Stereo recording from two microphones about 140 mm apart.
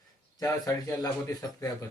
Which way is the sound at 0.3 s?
20° left (ahead or behind).